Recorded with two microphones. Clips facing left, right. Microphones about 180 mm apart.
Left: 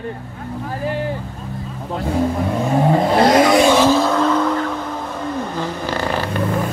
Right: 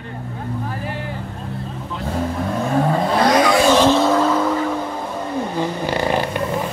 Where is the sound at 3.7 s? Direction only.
5° left (ahead or behind).